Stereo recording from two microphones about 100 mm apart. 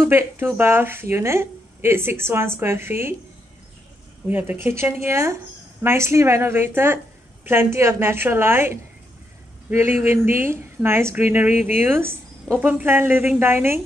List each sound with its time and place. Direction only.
0.0 s a woman's voice: 25° right (ahead or behind)
4.3 s a woman's voice: 20° right (ahead or behind)